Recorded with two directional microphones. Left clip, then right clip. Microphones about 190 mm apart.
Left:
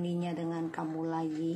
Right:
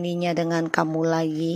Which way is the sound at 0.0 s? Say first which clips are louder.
Right 11 dB; 50° right (ahead or behind).